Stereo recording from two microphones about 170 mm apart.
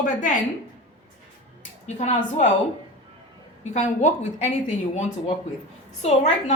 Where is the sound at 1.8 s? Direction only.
45° left (ahead or behind).